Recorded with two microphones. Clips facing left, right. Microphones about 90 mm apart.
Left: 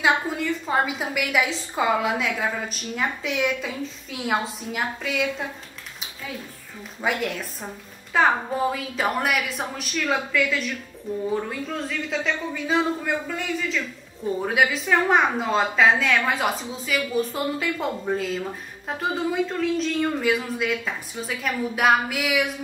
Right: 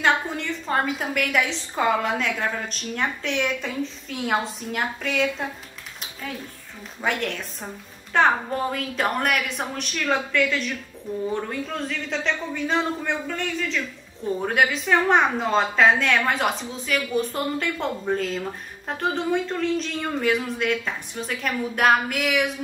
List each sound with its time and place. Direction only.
0.0 s a woman's voice: 5° left (ahead or behind)
7.0 s a woman's voice: 5° left (ahead or behind)